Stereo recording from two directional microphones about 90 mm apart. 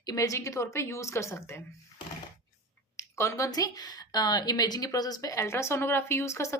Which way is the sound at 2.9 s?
35° left (ahead or behind).